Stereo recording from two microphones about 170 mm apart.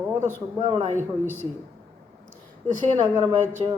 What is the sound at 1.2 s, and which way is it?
Speech, 10° left (ahead or behind).